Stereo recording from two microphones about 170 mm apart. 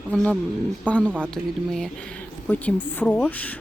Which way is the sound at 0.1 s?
5° left (ahead or behind).